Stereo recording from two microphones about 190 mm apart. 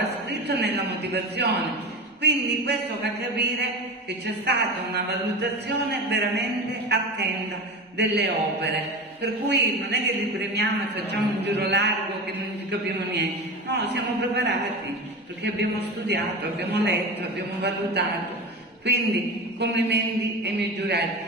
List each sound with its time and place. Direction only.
0.3 s a sound: 60° right (ahead or behind)
1.1 s a man's voice: 60° right (ahead or behind)
13.1 s a man's voice: 60° right (ahead or behind)
15.8 s a man's voice: 65° right (ahead or behind)